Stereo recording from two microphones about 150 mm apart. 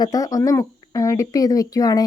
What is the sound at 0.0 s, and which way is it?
Speech, 25° left (ahead or behind).